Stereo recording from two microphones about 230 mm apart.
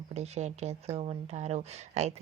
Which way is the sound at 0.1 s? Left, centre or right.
Right.